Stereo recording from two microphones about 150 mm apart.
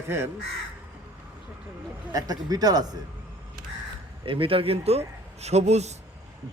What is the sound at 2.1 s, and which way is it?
Speech, 25° right (ahead or behind).